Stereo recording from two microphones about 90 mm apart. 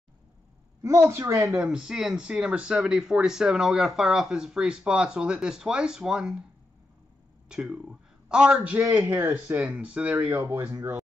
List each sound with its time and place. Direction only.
0.8 s a woman's voice: 35° right (ahead or behind)
1.5 s speech: 10° right (ahead or behind)
7.4 s a man's voice: 5° right (ahead or behind)
10.3 s speech: 30° right (ahead or behind)